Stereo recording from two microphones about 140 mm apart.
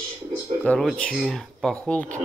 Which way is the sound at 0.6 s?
5° left (ahead or behind).